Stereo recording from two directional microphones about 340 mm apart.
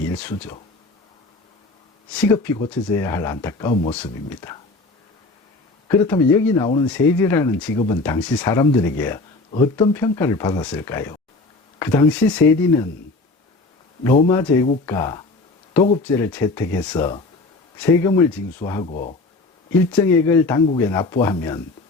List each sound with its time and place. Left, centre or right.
0.1 s speech: centre
2.1 s speech: centre
6.1 s speech: centre
14.0 s speech: centre
18.9 s speech: left
19.9 s speech: centre